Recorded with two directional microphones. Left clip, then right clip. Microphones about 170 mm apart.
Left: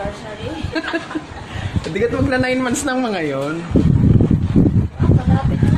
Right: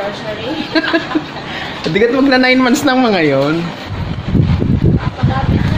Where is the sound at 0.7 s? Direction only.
25° right (ahead or behind).